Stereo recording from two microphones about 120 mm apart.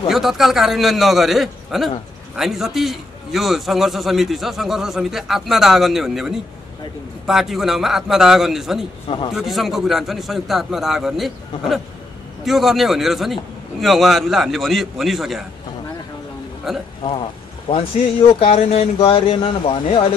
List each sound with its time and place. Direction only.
0.1 s a man's voice: centre (ahead or behind)
9.0 s speech: 40° left (ahead or behind)
9.3 s a man's voice: centre (ahead or behind)
16.7 s a man's voice: 5° right (ahead or behind)
17.6 s speech: 50° left (ahead or behind)